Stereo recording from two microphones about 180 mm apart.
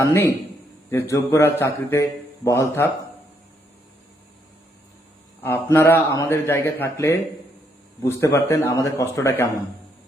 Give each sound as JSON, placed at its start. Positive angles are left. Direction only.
{"t": 0.0, "sound": "a man's voice", "side_deg": 15}
{"t": 5.4, "sound": "a man's voice", "side_deg": 15}